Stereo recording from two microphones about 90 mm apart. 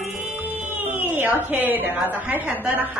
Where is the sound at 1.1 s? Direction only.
20° right (ahead or behind).